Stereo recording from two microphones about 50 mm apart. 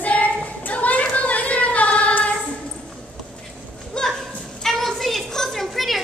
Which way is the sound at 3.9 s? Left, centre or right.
Centre.